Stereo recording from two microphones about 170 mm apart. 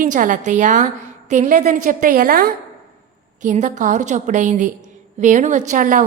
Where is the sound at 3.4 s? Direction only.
45° right (ahead or behind).